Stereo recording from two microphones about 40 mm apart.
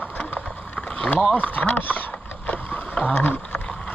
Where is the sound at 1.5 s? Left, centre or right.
Left.